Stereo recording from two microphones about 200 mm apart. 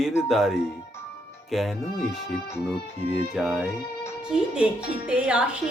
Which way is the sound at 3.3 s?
Centre (ahead or behind).